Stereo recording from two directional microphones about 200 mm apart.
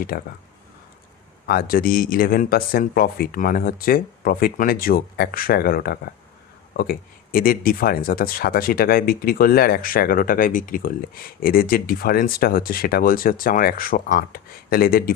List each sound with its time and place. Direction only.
0.1 s speech: 50° left (ahead or behind)
1.5 s speech: 45° left (ahead or behind)